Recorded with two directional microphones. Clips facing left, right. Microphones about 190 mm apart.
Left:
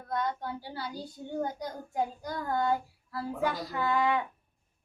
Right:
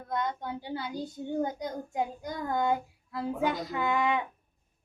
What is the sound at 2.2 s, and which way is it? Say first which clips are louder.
A woman's voice: right 2 dB; 20° right (ahead or behind).